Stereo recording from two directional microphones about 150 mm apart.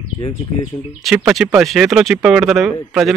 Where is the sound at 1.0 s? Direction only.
5° right (ahead or behind).